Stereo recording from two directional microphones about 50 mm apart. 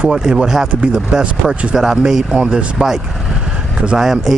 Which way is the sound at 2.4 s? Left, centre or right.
Right.